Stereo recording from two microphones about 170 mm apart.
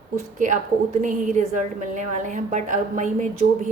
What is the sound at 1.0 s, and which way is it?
A woman's voice, 45° right (ahead or behind).